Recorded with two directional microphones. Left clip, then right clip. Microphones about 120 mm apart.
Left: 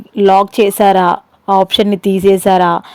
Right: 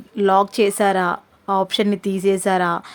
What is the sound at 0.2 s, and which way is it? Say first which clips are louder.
A woman's voice: left 7 dB; 30° left (ahead or behind).